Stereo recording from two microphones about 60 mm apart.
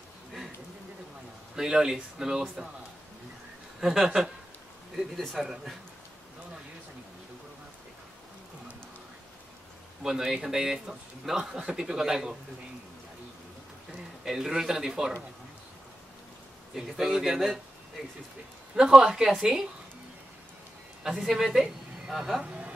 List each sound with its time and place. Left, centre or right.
1.6 s a man's voice: centre
3.8 s a man's voice: centre
4.9 s speech: centre
10.0 s a man's voice: centre
14.2 s a man's voice: centre
16.7 s a man's voice: centre
18.8 s a man's voice: centre
21.3 s a woman's voice: centre
22.4 s a sound: centre